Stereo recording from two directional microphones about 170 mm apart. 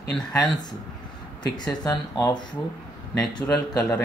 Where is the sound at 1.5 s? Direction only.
25° left (ahead or behind).